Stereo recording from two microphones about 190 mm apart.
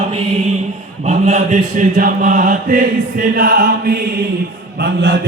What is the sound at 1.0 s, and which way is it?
Chant, 40° right (ahead or behind).